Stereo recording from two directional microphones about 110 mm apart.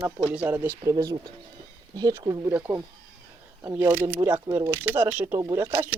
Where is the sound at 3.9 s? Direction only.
15° right (ahead or behind).